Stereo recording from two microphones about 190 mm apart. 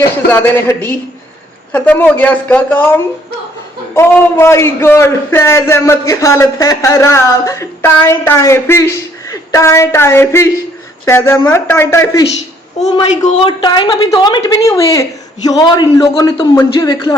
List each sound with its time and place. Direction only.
0.3 s a man's voice: 10° left (ahead or behind)
3.9 s a man's voice: 15° left (ahead or behind)
12.8 s a woman's voice: 35° left (ahead or behind)
13.6 s a man's voice: 20° left (ahead or behind)